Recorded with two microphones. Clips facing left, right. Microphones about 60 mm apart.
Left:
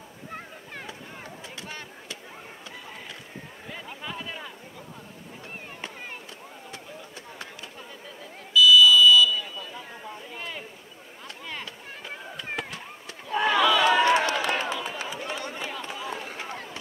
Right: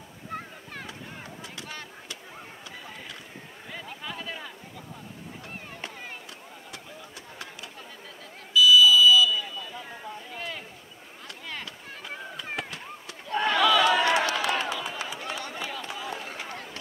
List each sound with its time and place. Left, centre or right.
1.6 s a sound: left
8.5 s buzzer: centre
11.4 s chop: centre
13.3 s crowd: centre
13.7 s run: left